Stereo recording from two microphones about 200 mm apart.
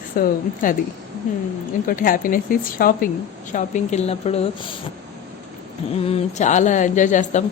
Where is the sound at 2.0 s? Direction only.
45° left (ahead or behind).